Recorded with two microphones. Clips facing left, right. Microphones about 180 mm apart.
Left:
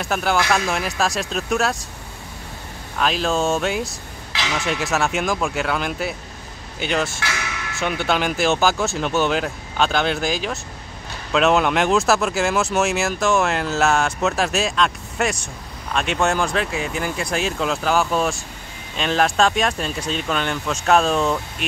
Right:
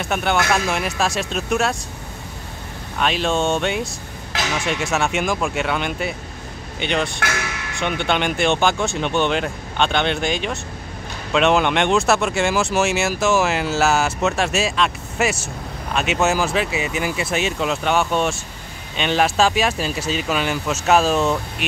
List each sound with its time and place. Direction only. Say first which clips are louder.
0.0 s speech: even; centre (ahead or behind)
3.0 s speech: even; centre (ahead or behind)